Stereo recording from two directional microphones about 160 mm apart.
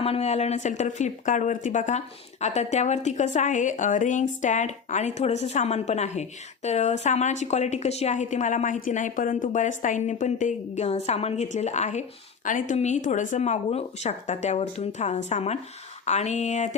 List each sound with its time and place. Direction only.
0.0 s a woman's voice: 40° left (ahead or behind)